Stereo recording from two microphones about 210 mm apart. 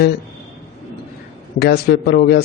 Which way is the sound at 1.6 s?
50° left (ahead or behind).